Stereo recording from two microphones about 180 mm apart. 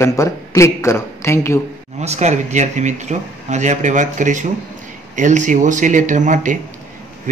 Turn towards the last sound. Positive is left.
turn(degrees=-45)  # may be behind; listen again after turning